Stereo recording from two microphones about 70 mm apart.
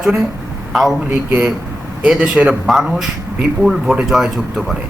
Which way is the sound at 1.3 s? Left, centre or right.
Centre.